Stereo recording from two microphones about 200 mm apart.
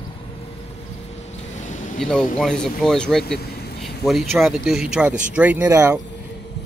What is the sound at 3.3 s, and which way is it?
Vehicle, 55° left (ahead or behind).